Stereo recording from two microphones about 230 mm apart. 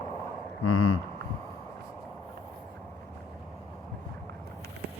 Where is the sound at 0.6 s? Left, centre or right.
Left.